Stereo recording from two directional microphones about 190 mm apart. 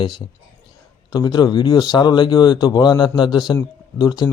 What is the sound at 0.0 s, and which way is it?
Speech, 25° left (ahead or behind).